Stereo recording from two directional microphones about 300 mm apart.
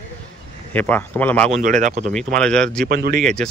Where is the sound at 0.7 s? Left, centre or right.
Centre.